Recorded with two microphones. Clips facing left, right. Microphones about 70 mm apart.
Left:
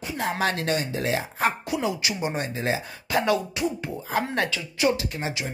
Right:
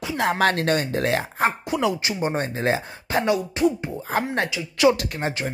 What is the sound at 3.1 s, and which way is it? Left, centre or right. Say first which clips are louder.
Speech: right 1 dB; right.